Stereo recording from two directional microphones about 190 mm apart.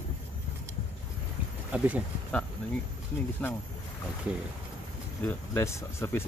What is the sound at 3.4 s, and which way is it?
Speech, 10° left (ahead or behind).